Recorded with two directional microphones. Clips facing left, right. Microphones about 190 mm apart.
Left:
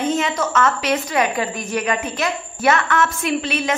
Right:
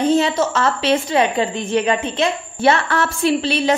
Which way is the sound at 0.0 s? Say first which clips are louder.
Right 5 dB; 35° right (ahead or behind).